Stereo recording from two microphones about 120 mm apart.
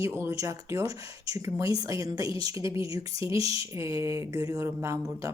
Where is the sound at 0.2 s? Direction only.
25° right (ahead or behind).